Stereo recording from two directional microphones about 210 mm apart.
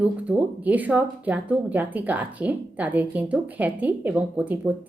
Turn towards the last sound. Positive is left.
turn(degrees=-10)  # may be behind; listen again after turning